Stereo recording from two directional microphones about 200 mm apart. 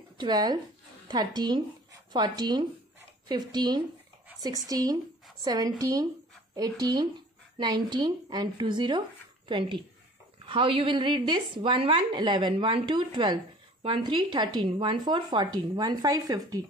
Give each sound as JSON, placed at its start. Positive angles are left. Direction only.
{"t": 0.2, "sound": "a woman's voice", "side_deg": -20}